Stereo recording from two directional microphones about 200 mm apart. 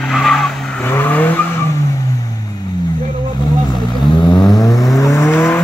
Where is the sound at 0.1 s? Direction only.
Centre (ahead or behind).